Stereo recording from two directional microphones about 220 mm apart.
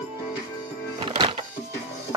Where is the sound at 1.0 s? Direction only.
20° right (ahead or behind).